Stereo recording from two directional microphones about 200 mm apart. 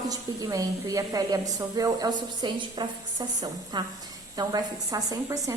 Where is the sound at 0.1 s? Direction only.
20° right (ahead or behind).